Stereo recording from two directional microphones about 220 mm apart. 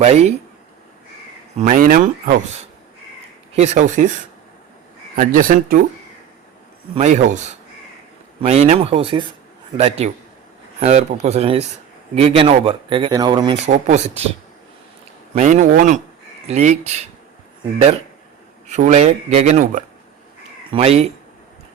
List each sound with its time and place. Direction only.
0.0 s speech: 30° right (ahead or behind)
1.5 s speech: 35° right (ahead or behind)
5.1 s speech: 40° right (ahead or behind)
6.9 s speech: 30° right (ahead or behind)
13.8 s speech: 30° right (ahead or behind)
15.4 s speech: 30° right (ahead or behind)
18.7 s speech: 35° right (ahead or behind)